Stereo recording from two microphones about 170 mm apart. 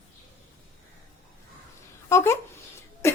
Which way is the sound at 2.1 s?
15° left (ahead or behind).